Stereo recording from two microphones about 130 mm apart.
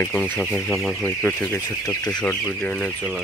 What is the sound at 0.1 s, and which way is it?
Speech, 5° left (ahead or behind).